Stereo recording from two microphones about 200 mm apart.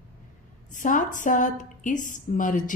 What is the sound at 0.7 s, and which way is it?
A woman's voice, 40° left (ahead or behind).